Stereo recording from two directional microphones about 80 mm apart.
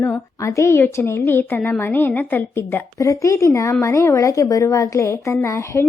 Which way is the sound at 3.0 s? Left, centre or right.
Left.